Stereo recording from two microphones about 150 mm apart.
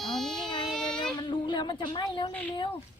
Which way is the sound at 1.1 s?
30° left (ahead or behind).